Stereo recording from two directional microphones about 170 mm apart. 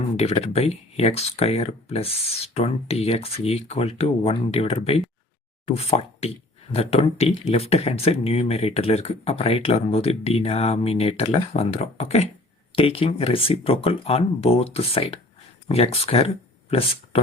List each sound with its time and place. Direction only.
0.2 s speech: 35° left (ahead or behind)